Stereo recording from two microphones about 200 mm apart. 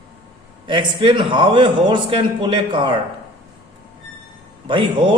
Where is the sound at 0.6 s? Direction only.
25° right (ahead or behind).